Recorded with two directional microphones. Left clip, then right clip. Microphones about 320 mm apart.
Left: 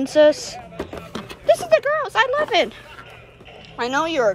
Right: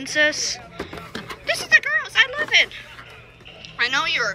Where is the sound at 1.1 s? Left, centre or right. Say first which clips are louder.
Left 8 dB; centre.